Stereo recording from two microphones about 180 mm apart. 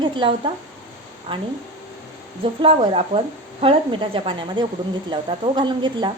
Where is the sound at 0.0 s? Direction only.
25° right (ahead or behind).